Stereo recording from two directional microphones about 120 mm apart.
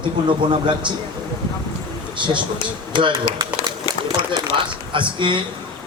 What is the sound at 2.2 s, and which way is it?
Speech, 40° right (ahead or behind).